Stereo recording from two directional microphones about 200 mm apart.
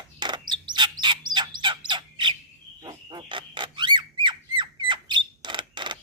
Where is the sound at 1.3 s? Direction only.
20° right (ahead or behind).